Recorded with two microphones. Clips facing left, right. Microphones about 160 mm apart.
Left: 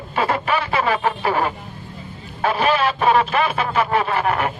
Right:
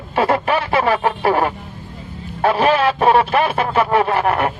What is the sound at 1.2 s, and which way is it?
Speech, 60° right (ahead or behind).